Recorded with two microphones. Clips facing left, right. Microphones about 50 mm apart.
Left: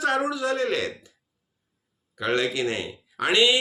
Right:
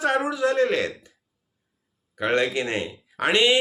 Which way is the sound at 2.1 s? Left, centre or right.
Right.